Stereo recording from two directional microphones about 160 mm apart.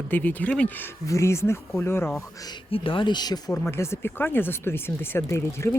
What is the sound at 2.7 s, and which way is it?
Speech, 35° left (ahead or behind).